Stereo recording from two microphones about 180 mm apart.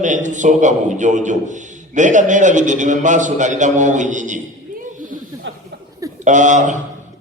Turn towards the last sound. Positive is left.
turn(degrees=-40)  # may be behind; listen again after turning